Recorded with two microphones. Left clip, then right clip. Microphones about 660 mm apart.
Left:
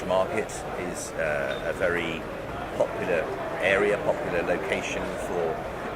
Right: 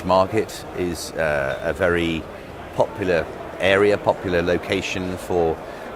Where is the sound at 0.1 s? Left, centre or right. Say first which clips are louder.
Right 7 dB; right.